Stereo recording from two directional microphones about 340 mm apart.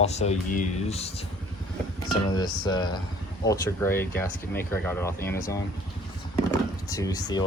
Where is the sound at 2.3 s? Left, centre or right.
Centre.